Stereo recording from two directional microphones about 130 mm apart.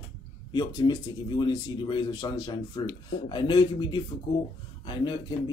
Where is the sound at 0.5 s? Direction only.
30° left (ahead or behind).